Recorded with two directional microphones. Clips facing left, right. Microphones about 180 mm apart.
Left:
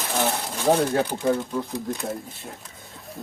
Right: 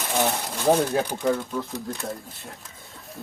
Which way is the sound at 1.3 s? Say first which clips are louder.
Left 2 dB; 15° left (ahead or behind).